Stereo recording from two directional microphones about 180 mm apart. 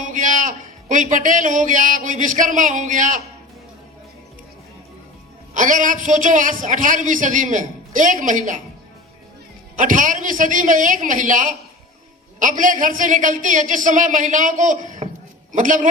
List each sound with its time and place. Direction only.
0.0 s a man's voice: 45° right (ahead or behind)
5.5 s a man's voice: 45° right (ahead or behind)
9.7 s a man's voice: 45° right (ahead or behind)